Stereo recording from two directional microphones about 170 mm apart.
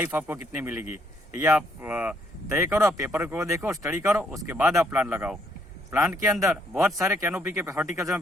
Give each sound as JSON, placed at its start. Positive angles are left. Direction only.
{"t": 0.0, "sound": "speech", "side_deg": -10}
{"t": 7.0, "sound": "speech", "side_deg": -15}